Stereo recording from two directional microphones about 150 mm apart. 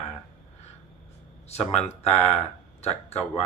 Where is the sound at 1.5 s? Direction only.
45° left (ahead or behind).